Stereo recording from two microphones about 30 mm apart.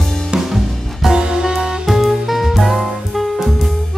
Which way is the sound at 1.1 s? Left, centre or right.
Right.